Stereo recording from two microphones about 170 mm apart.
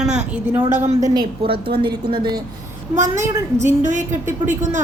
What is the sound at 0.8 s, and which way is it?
Speech, 45° right (ahead or behind).